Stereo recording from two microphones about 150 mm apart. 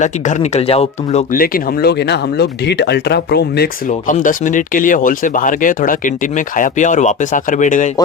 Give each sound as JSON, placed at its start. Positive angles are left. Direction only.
{"t": 0.0, "sound": "speech", "side_deg": 50}
{"t": 1.3, "sound": "speech", "side_deg": 75}
{"t": 4.1, "sound": "speech", "side_deg": 60}